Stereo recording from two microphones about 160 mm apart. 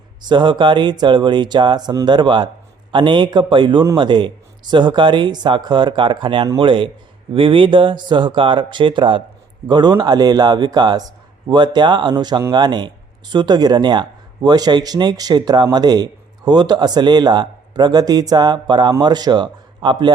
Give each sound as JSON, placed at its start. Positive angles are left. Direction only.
{"t": 0.3, "sound": "a man's voice", "side_deg": -30}